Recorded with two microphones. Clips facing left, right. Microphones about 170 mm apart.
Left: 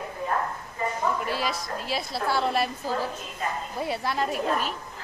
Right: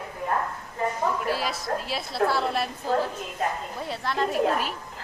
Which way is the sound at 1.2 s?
Centre (ahead or behind).